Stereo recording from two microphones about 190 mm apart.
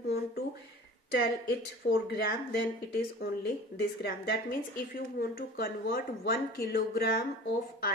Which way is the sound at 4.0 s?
60° left (ahead or behind).